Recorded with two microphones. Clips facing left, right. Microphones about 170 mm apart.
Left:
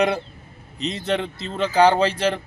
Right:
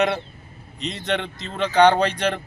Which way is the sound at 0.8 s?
5° left (ahead or behind).